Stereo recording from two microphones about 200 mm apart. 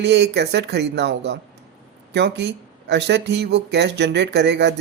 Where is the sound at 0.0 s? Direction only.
55° right (ahead or behind).